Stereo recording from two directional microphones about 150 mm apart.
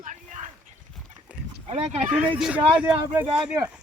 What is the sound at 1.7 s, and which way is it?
Speech, 45° right (ahead or behind).